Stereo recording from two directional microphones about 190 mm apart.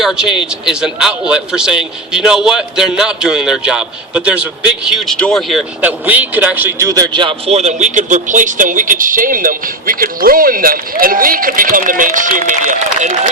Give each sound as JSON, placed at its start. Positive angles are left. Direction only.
{"t": 0.0, "sound": "a man's voice", "side_deg": -5}